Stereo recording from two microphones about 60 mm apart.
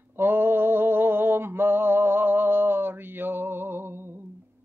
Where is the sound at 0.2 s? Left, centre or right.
Right.